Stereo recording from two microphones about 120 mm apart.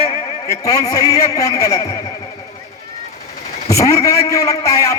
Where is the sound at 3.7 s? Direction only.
25° left (ahead or behind).